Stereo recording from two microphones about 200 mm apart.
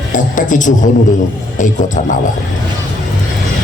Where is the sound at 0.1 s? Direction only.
40° left (ahead or behind).